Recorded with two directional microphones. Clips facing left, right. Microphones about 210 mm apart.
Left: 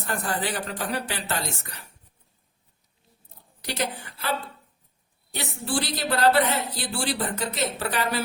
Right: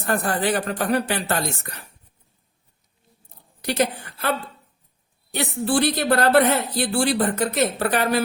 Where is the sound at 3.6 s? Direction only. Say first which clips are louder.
Right 7 dB; 55° right (ahead or behind).